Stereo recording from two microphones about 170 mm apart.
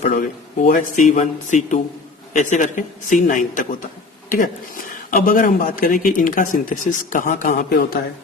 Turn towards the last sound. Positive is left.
turn(degrees=60)  # may be behind; listen again after turning